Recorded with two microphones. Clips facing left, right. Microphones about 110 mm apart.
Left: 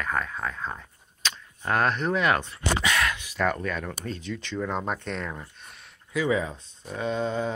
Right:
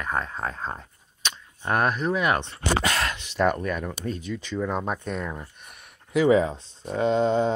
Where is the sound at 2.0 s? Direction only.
5° right (ahead or behind).